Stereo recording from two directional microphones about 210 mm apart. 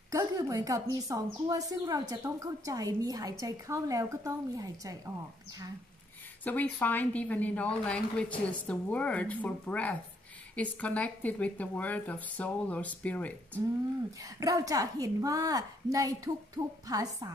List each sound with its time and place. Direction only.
0.1 s a woman's voice: 15° right (ahead or behind)
6.4 s a woman's voice: 10° left (ahead or behind)
14.4 s a woman's voice: 15° right (ahead or behind)